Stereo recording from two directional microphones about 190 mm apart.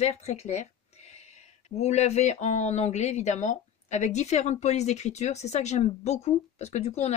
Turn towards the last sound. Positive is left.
turn(degrees=35)  # may be behind; listen again after turning